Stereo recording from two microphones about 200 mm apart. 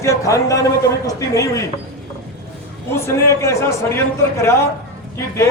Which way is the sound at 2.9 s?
15° left (ahead or behind).